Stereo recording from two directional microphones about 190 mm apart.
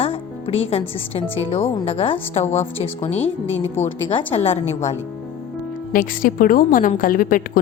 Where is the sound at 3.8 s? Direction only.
35° left (ahead or behind).